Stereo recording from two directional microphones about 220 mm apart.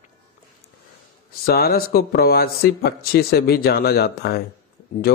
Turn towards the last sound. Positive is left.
turn(degrees=45)  # may be behind; listen again after turning